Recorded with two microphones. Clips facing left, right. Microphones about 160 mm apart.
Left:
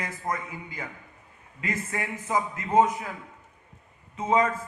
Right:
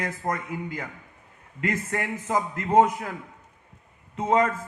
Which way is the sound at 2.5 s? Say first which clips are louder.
Right 3 dB; 65° right (ahead or behind).